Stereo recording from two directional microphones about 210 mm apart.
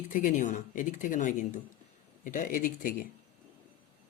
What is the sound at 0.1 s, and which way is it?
Speech, 40° left (ahead or behind).